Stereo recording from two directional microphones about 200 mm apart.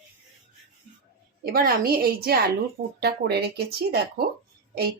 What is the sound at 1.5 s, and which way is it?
A woman's voice, 50° right (ahead or behind).